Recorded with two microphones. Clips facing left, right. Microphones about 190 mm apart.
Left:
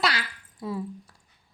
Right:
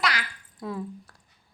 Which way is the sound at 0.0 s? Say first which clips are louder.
Left 1 dB; 30° left (ahead or behind).